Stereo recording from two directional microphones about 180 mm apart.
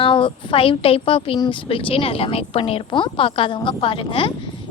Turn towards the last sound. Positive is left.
turn(degrees=30)  # may be behind; listen again after turning